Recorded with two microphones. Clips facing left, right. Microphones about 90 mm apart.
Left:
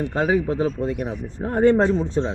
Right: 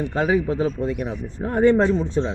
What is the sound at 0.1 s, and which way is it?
Speech, 35° left (ahead or behind).